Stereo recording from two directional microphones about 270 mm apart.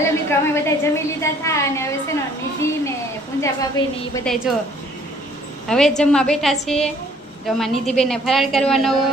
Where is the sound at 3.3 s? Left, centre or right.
Centre.